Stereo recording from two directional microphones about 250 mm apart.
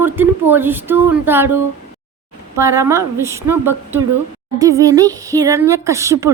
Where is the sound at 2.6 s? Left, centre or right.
Centre.